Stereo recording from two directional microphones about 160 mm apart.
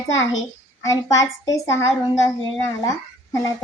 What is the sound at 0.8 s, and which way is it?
Speech, 20° left (ahead or behind).